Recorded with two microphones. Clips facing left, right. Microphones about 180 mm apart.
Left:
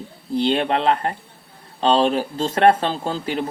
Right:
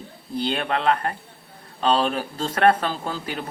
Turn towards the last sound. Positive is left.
turn(degrees=25)  # may be behind; listen again after turning